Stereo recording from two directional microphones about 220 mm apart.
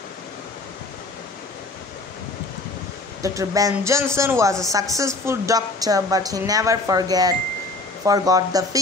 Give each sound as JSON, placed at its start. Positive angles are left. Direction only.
{"t": 3.2, "sound": "speech", "side_deg": -15}